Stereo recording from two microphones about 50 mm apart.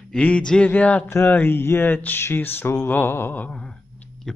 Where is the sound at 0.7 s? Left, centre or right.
Left.